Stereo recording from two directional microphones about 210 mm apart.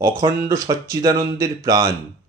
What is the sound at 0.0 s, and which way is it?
Speech, 15° right (ahead or behind).